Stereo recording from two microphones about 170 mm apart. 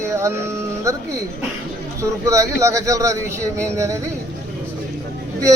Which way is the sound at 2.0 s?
20° right (ahead or behind).